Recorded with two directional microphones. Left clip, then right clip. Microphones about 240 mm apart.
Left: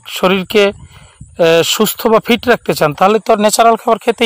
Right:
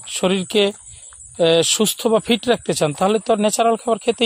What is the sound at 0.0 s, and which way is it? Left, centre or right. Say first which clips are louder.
Speech: left 7 dB; centre.